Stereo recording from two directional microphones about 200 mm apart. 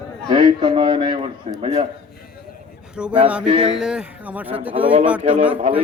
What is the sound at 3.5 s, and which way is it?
Speech, 25° right (ahead or behind).